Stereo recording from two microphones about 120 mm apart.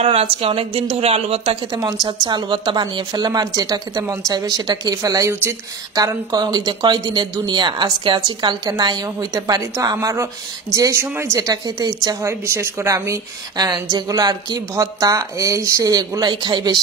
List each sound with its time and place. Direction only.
0.0 s speech: 55° right (ahead or behind)
1.7 s a woman's voice: 30° right (ahead or behind)
5.3 s speech: 20° right (ahead or behind)
5.9 s a woman's voice: 30° right (ahead or behind)